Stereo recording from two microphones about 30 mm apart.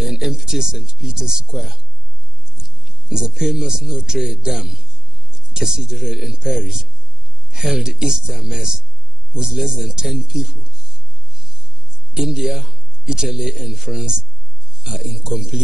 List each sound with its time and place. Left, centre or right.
0.0 s a man's voice: centre
2.6 s a sound: right
3.1 s a man's voice: right
5.3 s a man's voice: right
12.1 s a man's voice: right